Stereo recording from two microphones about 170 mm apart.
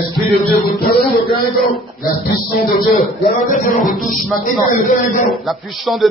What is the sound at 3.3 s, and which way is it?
A man's voice, 50° left (ahead or behind).